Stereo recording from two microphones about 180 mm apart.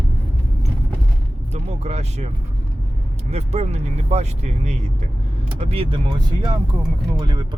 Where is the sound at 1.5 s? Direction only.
35° right (ahead or behind).